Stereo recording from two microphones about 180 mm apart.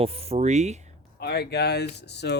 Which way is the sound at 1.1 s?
65° left (ahead or behind).